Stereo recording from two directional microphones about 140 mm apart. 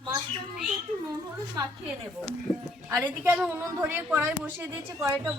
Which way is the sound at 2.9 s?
15° right (ahead or behind).